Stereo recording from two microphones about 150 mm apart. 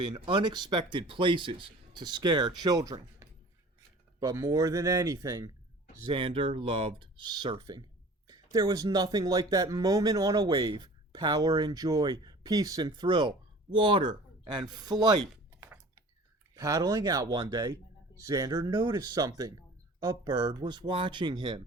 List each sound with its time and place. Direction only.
0.0 s speech: 30° right (ahead or behind)
6.1 s speech: 35° right (ahead or behind)
15.6 s typing: 20° right (ahead or behind)
16.6 s speech: 25° right (ahead or behind)